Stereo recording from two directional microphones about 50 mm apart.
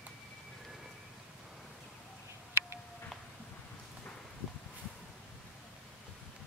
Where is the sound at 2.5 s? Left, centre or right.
Right.